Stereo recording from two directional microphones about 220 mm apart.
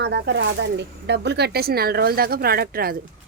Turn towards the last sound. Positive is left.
turn(degrees=-40)  # may be behind; listen again after turning